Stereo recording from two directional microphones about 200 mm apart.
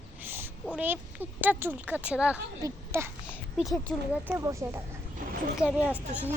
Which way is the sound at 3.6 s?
Centre (ahead or behind).